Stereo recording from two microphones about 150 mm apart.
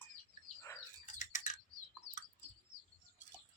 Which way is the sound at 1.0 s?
55° left (ahead or behind).